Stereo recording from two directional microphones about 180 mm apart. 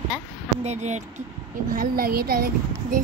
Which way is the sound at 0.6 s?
40° right (ahead or behind).